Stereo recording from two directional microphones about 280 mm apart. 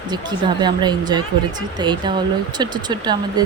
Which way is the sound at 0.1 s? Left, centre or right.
Centre.